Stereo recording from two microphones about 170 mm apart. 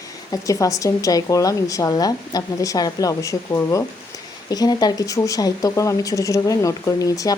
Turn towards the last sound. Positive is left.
turn(degrees=20)  # may be behind; listen again after turning